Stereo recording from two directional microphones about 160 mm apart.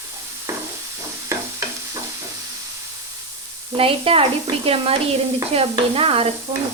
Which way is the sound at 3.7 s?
35° right (ahead or behind).